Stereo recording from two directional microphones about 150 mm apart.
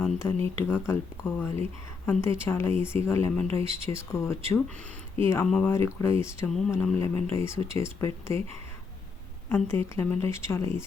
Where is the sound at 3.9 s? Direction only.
20° left (ahead or behind).